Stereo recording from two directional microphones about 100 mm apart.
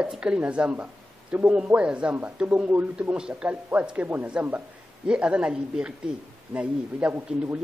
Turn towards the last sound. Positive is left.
turn(degrees=-15)  # may be behind; listen again after turning